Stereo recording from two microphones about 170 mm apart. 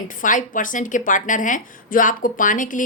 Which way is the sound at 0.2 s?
50° left (ahead or behind).